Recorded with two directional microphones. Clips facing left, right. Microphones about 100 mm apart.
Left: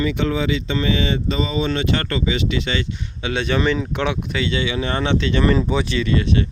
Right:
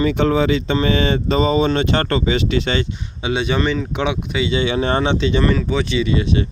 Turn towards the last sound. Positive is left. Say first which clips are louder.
# right 1 dB
turn(degrees=-10)  # may be behind; listen again after turning